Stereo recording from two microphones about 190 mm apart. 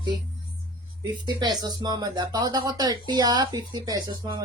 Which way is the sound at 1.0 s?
20° right (ahead or behind).